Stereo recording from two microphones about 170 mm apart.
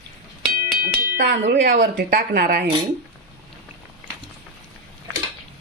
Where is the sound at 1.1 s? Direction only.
90° right.